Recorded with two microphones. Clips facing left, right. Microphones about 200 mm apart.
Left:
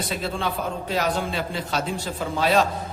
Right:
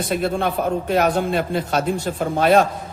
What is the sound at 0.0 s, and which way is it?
A man's voice, 55° right (ahead or behind).